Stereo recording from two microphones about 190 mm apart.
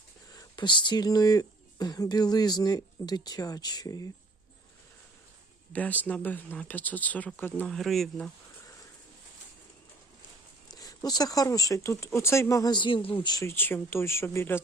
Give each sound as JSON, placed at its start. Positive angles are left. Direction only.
{"t": 0.3, "sound": "speech", "side_deg": 25}
{"t": 5.7, "sound": "speech", "side_deg": 10}
{"t": 10.7, "sound": "speech", "side_deg": 20}